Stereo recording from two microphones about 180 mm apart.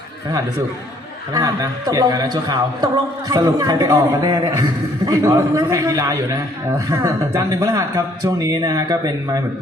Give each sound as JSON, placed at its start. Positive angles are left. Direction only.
{"t": 1.3, "sound": "a man's voice", "side_deg": -20}